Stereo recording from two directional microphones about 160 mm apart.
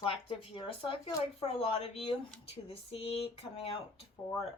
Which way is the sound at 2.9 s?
35° left (ahead or behind).